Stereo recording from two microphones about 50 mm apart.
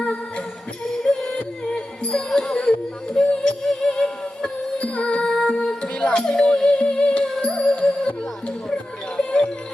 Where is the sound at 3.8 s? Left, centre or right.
Centre.